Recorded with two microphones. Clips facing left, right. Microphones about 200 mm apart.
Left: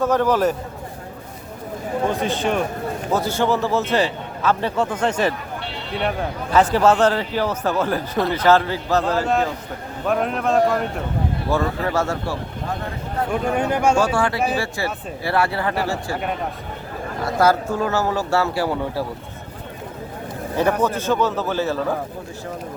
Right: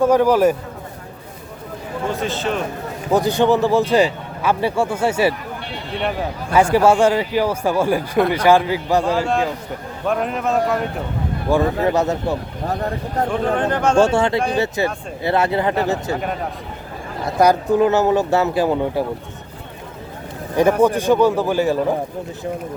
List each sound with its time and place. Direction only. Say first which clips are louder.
0.0 s a man's voice: right 4 dB; 10° right (ahead or behind)
2.2 s speech: left 1 dB; 15° left (ahead or behind)
3.1 s a man's voice: right 5 dB; 15° right (ahead or behind)
10.1 s a man's voice: even; centre (ahead or behind)
11.5 s a man's voice: right 5 dB; 15° right (ahead or behind)
12.6 s speech: right 7 dB; 40° right (ahead or behind)
13.2 s speech: right 1 dB; 10° left (ahead or behind)
14.0 s speech: right 4 dB; 25° right (ahead or behind)
14.3 s a man's voice: right 3 dB; 5° left (ahead or behind)
15.2 s speech: right 3 dB; 20° right (ahead or behind)
17.2 s speech: right 3 dB; 15° right (ahead or behind)
20.6 s a man's voice: right 5 dB; 10° right (ahead or behind)